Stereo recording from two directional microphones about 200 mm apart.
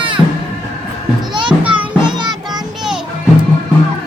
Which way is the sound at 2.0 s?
20° right (ahead or behind).